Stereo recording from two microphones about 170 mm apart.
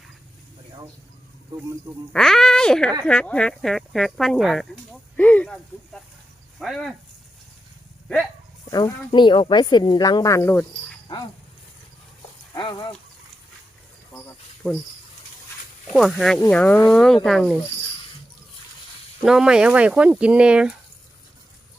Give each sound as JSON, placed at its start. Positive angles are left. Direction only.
{"t": 2.1, "sound": "speech", "side_deg": 5}
{"t": 8.7, "sound": "speech", "side_deg": 25}
{"t": 12.5, "sound": "livestock", "side_deg": 25}
{"t": 14.6, "sound": "speech", "side_deg": 5}
{"t": 15.9, "sound": "speech", "side_deg": 0}
{"t": 19.2, "sound": "speech", "side_deg": -5}